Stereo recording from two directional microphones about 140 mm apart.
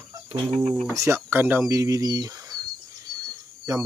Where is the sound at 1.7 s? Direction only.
25° right (ahead or behind).